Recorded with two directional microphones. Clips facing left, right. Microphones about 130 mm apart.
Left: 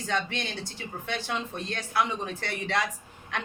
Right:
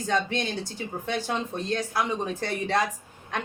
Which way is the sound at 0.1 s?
40° right (ahead or behind).